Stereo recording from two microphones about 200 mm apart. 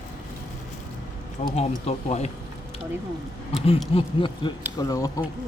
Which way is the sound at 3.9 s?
25° left (ahead or behind).